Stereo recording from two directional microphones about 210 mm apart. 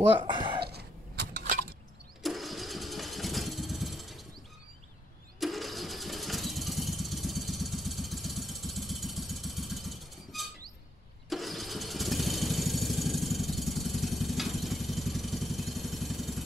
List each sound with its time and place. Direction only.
0.3 s a sound: 20° right (ahead or behind)
2.2 s engine starting: centre (ahead or behind)
5.4 s engine starting: centre (ahead or behind)